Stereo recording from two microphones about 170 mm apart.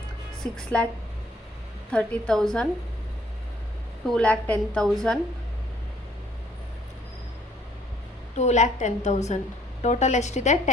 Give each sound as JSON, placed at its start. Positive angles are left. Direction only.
{"t": 0.5, "sound": "a woman's voice", "side_deg": 5}
{"t": 1.9, "sound": "a woman's voice", "side_deg": 5}
{"t": 4.0, "sound": "a woman's voice", "side_deg": 5}
{"t": 8.4, "sound": "a woman's voice", "side_deg": 45}